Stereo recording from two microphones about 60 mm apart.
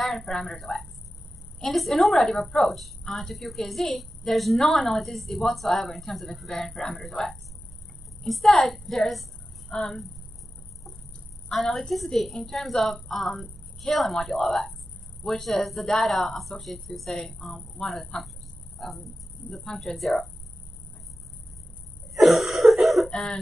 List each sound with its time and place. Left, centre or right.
0.0 s a woman's voice: centre
11.5 s a woman's voice: centre
22.1 s cough: centre
23.0 s music: centre